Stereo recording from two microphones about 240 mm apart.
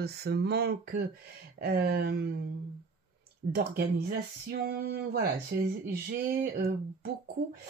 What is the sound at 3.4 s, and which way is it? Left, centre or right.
Speech, right.